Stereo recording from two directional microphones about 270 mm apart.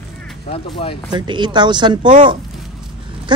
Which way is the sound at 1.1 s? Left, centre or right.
Centre.